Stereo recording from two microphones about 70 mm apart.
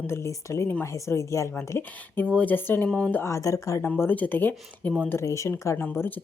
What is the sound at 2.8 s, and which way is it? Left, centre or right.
Speech, centre.